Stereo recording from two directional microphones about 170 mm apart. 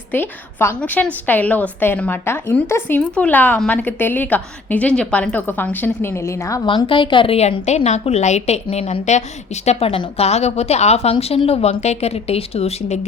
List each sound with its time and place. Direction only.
0.1 s a woman's voice: 15° left (ahead or behind)
6.7 s a woman's voice: 30° left (ahead or behind)